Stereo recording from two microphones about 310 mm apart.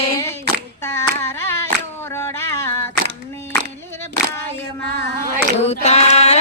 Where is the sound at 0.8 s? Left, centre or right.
Centre.